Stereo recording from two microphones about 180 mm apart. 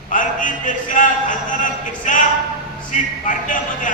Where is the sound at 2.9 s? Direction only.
45° left (ahead or behind).